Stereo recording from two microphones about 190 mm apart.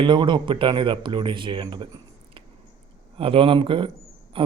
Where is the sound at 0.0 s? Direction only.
25° right (ahead or behind).